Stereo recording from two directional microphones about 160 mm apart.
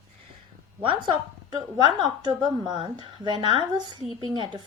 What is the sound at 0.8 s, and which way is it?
A woman's voice, 30° right (ahead or behind).